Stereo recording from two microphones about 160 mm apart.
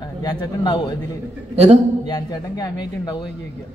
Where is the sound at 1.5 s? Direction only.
40° right (ahead or behind).